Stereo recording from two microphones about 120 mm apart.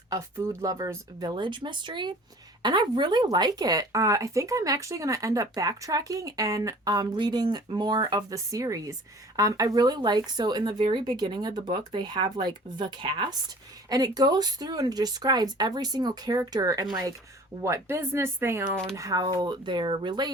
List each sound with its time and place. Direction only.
0.1 s speech: 25° right (ahead or behind)
18.9 s speech: 30° right (ahead or behind)